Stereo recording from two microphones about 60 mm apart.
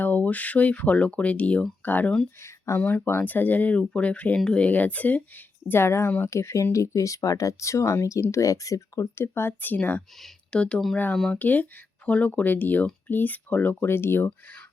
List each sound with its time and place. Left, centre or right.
0.0 s speech: left
5.6 s speech: left
6.1 s speech: left
6.3 s speech: left
9.1 s speech: left
10.5 s speech: centre
11.3 s speech: left
13.8 s speech: left